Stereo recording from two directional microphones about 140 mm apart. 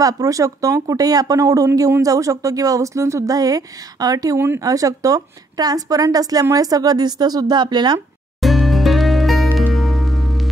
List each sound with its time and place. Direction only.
0.0 s speech: 25° right (ahead or behind)
8.4 s music: centre (ahead or behind)